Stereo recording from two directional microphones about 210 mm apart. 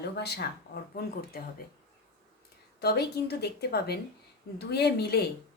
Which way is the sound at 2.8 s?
50° left (ahead or behind).